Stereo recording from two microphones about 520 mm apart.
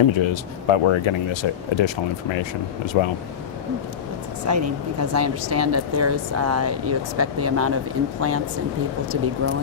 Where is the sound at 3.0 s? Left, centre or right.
Left.